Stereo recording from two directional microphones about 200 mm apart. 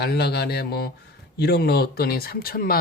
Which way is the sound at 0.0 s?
55° left (ahead or behind).